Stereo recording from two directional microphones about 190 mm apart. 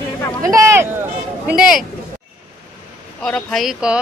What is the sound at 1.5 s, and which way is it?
Speech, 5° right (ahead or behind).